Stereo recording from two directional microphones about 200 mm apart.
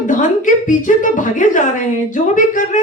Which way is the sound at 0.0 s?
40° left (ahead or behind).